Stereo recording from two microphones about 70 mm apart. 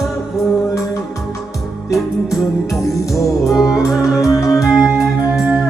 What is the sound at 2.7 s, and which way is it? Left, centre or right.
Music, left.